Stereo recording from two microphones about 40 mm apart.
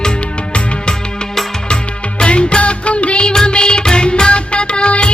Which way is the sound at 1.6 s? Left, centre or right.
Left.